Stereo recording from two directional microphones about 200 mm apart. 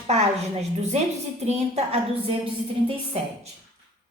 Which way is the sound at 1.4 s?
35° right (ahead or behind).